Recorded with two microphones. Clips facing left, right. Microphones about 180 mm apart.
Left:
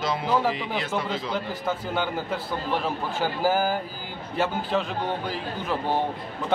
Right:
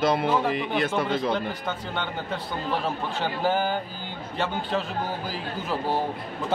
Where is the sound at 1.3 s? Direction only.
5° left (ahead or behind).